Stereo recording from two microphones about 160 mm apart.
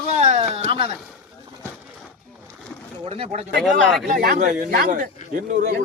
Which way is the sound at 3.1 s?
40° right (ahead or behind).